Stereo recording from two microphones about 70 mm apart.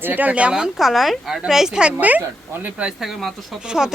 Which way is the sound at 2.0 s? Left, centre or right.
Right.